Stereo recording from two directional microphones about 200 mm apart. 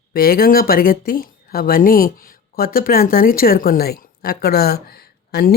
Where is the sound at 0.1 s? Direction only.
50° left (ahead or behind).